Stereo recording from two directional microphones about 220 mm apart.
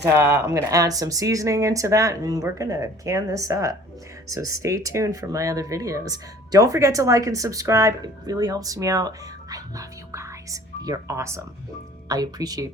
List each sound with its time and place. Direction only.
0.2 s speech: 10° right (ahead or behind)